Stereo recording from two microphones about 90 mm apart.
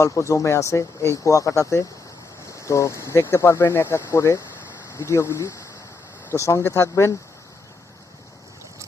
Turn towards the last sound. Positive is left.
turn(degrees=35)  # may be behind; listen again after turning